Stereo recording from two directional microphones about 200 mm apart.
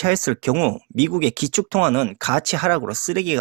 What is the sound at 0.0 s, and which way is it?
Speech, 20° right (ahead or behind).